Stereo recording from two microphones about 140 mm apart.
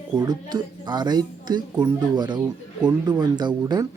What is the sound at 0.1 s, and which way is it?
Speech, 30° right (ahead or behind).